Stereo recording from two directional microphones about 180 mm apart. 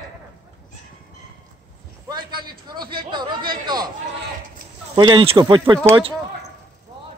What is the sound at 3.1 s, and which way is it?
Speech, 25° right (ahead or behind).